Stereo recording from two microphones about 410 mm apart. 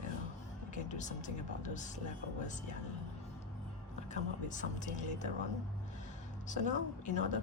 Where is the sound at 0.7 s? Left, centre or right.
Centre.